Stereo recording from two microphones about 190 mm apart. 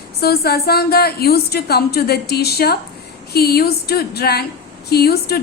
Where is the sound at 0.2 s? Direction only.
55° left (ahead or behind).